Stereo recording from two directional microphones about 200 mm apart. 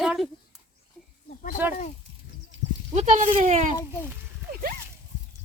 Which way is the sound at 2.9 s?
35° right (ahead or behind).